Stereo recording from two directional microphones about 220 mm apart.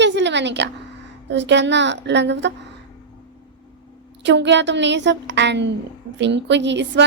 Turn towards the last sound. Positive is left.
turn(degrees=-55)  # may be behind; listen again after turning